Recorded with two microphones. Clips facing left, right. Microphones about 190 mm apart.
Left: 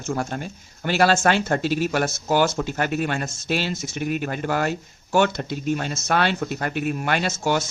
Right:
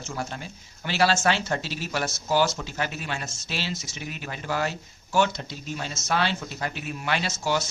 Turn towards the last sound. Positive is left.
turn(degrees=55)  # may be behind; listen again after turning